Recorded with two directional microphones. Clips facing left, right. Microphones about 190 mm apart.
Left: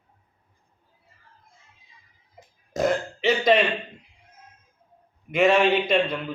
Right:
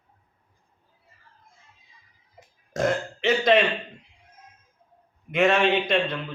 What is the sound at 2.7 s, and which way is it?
Speech, centre (ahead or behind).